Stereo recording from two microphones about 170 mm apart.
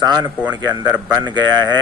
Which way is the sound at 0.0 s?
25° right (ahead or behind).